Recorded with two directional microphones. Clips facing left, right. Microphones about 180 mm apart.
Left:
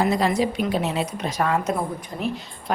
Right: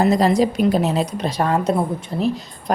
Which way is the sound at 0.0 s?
40° right (ahead or behind).